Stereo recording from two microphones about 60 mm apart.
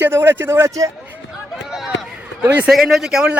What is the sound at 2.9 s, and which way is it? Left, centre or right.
Speech, centre.